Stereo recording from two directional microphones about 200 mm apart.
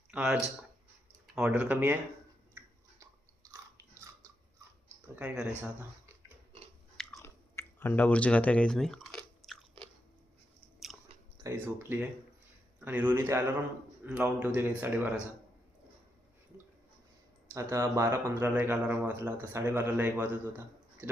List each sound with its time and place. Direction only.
0.1 s speech: 5° right (ahead or behind)
5.1 s speech: 5° right (ahead or behind)
6.9 s chewing: centre (ahead or behind)
11.4 s speech: 15° right (ahead or behind)
17.5 s speech: 15° right (ahead or behind)